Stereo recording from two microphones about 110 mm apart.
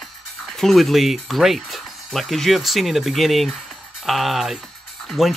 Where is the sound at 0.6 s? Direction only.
Centre (ahead or behind).